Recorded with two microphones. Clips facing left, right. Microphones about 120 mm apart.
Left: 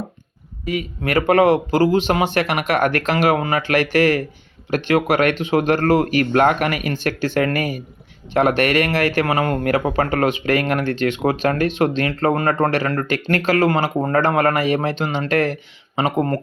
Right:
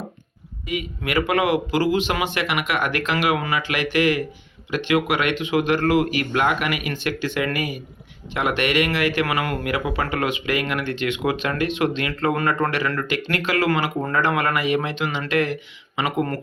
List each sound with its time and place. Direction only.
0.6 s speech: 40° left (ahead or behind)